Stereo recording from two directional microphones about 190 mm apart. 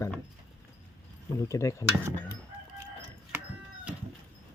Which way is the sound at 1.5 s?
15° left (ahead or behind).